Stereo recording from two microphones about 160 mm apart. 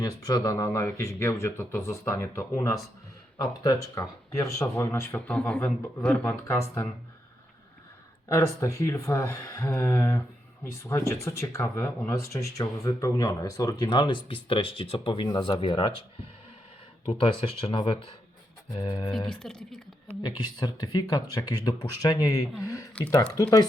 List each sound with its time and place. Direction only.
0.0 s speech: 25° left (ahead or behind)
8.3 s speech: 20° left (ahead or behind)
17.1 s speech: 35° left (ahead or behind)
19.3 s speech: 5° left (ahead or behind)
20.2 s speech: 30° left (ahead or behind)